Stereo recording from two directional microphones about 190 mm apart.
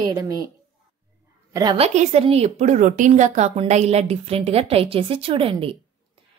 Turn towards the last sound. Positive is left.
turn(degrees=-30)  # may be behind; listen again after turning